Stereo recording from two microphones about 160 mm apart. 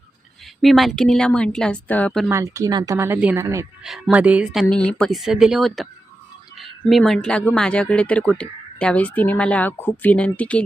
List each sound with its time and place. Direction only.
0.6 s a woman's voice: centre (ahead or behind)
2.3 s speech: 20° right (ahead or behind)
3.8 s speech: centre (ahead or behind)
4.7 s a woman's voice: 5° left (ahead or behind)